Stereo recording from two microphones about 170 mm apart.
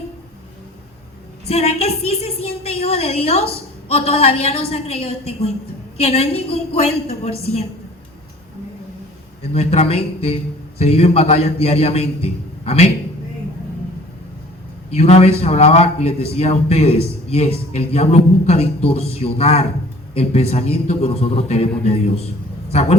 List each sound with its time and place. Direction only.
1.5 s a man's voice: 35° left (ahead or behind)
9.4 s a man's voice: 35° left (ahead or behind)
14.8 s a man's voice: 40° left (ahead or behind)
22.7 s a man's voice: 40° left (ahead or behind)